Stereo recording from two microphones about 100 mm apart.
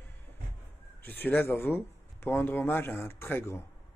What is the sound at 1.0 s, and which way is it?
Speech, 20° left (ahead or behind).